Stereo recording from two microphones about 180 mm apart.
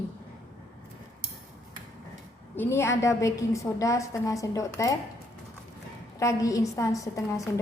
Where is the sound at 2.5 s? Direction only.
10° left (ahead or behind).